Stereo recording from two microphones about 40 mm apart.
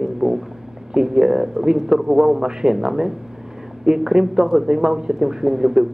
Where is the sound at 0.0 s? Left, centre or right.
Centre.